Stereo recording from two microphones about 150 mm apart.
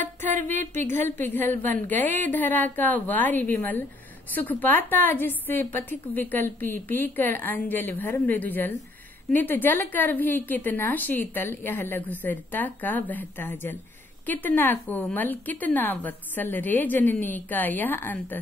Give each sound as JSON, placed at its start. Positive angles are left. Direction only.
{"t": 0.8, "sound": "a woman's voice", "side_deg": 15}